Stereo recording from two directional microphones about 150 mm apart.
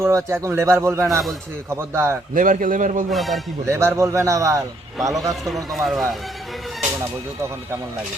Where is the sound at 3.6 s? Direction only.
15° right (ahead or behind).